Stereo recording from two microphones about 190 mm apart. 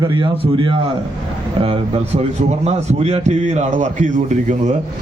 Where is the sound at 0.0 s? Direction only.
25° right (ahead or behind).